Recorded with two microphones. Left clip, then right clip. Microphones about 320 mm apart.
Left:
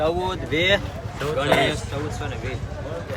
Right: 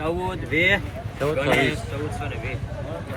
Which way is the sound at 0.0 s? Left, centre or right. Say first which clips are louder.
Left 4 dB; left.